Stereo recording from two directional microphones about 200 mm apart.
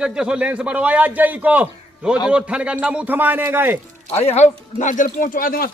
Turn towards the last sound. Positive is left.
turn(degrees=45)  # may be behind; listen again after turning